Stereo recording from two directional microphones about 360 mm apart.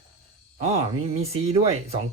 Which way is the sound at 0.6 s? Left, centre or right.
Centre.